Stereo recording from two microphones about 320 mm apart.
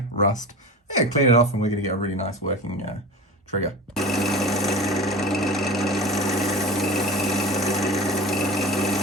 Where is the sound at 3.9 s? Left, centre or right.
Centre.